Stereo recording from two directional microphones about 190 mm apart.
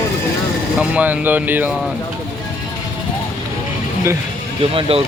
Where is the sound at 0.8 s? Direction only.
5° right (ahead or behind).